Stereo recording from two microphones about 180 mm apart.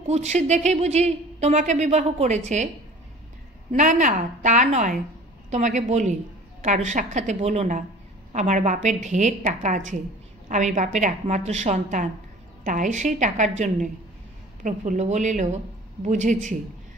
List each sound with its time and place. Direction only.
0.0 s a woman's voice: 40° right (ahead or behind)
3.7 s a woman's voice: 45° right (ahead or behind)